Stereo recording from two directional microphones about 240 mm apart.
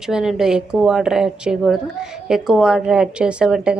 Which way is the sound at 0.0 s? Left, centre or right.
Centre.